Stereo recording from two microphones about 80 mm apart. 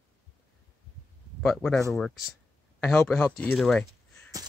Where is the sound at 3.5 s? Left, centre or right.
Centre.